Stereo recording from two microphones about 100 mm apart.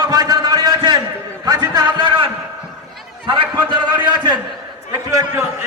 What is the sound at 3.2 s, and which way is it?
A man's voice, 50° right (ahead or behind).